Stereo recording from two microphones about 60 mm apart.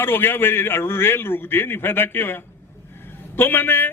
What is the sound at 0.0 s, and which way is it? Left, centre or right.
A man's voice, left.